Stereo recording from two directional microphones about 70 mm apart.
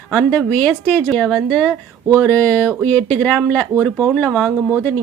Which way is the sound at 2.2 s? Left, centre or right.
Left.